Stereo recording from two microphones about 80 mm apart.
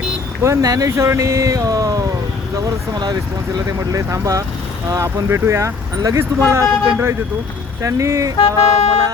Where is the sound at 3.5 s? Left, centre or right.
Right.